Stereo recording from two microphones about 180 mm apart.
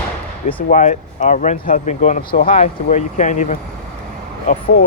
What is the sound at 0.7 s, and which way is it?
Speech, 40° left (ahead or behind).